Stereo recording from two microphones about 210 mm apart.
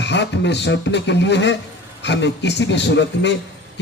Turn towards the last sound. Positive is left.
turn(degrees=55)  # may be behind; listen again after turning